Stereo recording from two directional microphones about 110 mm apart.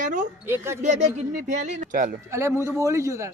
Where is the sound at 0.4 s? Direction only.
20° right (ahead or behind).